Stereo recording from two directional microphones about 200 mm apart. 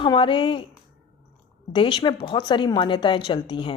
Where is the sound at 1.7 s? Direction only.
25° left (ahead or behind).